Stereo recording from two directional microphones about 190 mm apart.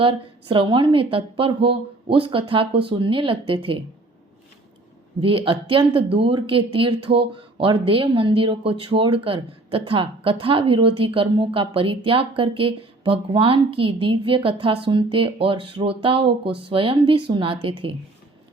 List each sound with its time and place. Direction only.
0.0 s speech: 25° right (ahead or behind)
5.2 s speech: 30° right (ahead or behind)